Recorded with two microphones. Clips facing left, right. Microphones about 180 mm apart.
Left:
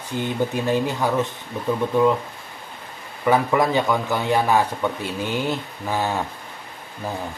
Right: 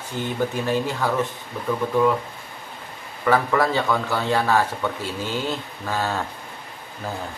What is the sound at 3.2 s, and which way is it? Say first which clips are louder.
A man's voice: left 1 dB; 15° left (ahead or behind).